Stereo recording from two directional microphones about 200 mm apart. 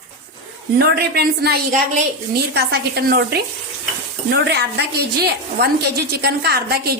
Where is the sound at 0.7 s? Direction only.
55° right (ahead or behind).